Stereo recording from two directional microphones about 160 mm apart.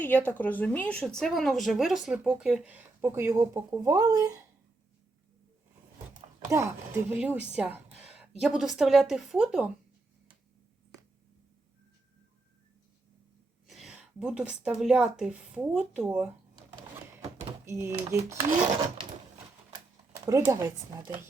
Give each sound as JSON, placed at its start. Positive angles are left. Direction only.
{"t": 0.0, "sound": "speech", "side_deg": 10}
{"t": 6.5, "sound": "speech", "side_deg": -15}
{"t": 13.7, "sound": "speech", "side_deg": 0}
{"t": 17.7, "sound": "speech", "side_deg": -15}
{"t": 20.2, "sound": "speech", "side_deg": -20}